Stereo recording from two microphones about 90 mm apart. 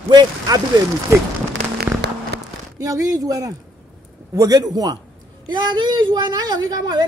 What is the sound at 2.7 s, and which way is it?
A woman's voice, 40° right (ahead or behind).